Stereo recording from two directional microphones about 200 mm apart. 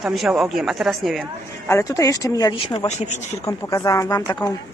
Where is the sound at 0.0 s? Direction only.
Centre (ahead or behind).